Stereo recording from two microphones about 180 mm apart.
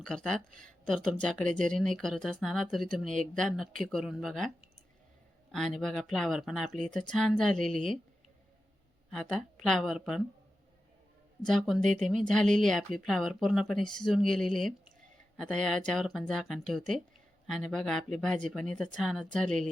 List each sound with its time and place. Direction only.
0.0 s speech: 5° left (ahead or behind)
5.5 s speech: centre (ahead or behind)
9.1 s speech: 5° left (ahead or behind)
11.4 s speech: centre (ahead or behind)
19.5 s speech: 45° right (ahead or behind)